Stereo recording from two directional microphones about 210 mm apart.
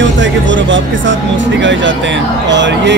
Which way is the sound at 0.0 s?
60° right (ahead or behind).